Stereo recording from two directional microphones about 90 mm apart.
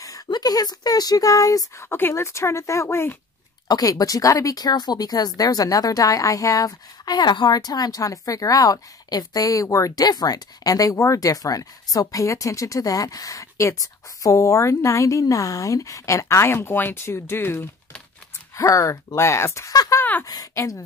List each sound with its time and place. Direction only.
0.0 s speech: 45° left (ahead or behind)
1.9 s speech: 25° left (ahead or behind)
3.6 s speech: 45° left (ahead or behind)